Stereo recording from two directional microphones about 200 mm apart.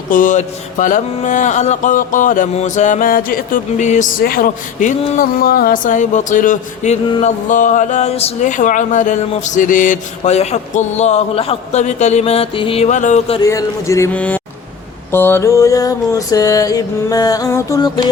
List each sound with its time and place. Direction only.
0.1 s music: 40° left (ahead or behind)
13.4 s music: 15° left (ahead or behind)